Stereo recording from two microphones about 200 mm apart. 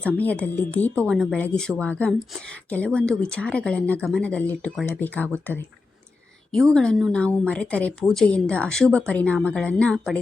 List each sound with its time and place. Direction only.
0.0 s speech: 5° left (ahead or behind)
6.7 s a woman's voice: 5° left (ahead or behind)